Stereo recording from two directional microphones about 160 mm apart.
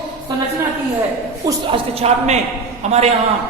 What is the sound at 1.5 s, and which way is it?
A woman's voice, 30° right (ahead or behind).